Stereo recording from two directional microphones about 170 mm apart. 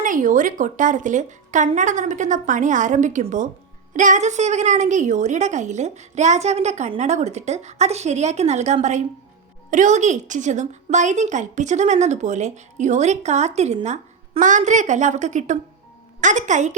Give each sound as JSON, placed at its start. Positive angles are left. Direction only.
{"t": 0.0, "sound": "a woman's voice", "side_deg": -50}